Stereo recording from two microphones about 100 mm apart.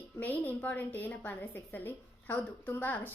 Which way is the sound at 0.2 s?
15° left (ahead or behind).